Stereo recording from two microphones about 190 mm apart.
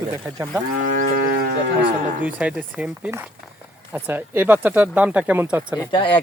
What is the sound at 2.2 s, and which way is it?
Speech, 5° right (ahead or behind).